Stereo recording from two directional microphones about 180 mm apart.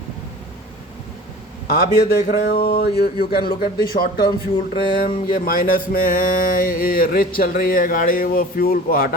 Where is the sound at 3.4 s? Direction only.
50° left (ahead or behind).